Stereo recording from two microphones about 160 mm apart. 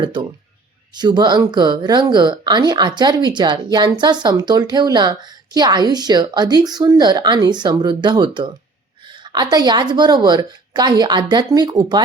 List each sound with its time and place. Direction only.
0.0 s speech: 30° right (ahead or behind)